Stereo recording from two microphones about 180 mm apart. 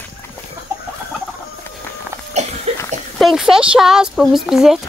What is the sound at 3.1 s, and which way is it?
Speech, centre (ahead or behind).